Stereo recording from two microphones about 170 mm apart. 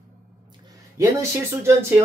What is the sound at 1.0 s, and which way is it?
Speech, 15° right (ahead or behind).